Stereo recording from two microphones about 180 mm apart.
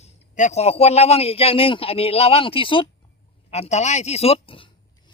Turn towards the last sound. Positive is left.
turn(degrees=30)  # may be behind; listen again after turning